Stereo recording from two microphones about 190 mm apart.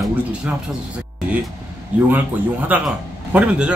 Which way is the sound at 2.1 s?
10° right (ahead or behind).